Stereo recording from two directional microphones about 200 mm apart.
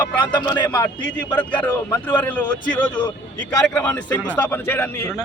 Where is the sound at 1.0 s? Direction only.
10° left (ahead or behind).